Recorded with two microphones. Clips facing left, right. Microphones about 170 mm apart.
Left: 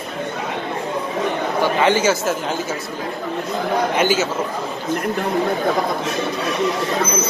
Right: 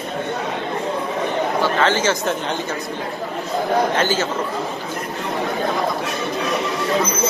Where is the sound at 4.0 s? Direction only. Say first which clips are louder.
Left 2 dB; 10° left (ahead or behind).